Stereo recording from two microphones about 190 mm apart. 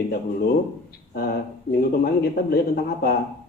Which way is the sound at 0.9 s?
55° left (ahead or behind).